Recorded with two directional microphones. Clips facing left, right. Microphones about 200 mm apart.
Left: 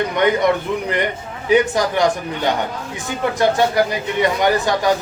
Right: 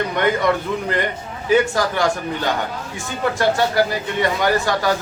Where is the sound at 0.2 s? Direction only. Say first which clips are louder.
Left 3 dB; 20° left (ahead or behind).